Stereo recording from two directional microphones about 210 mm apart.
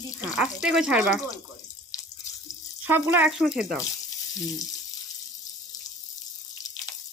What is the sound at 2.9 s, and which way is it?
Speech, 10° right (ahead or behind).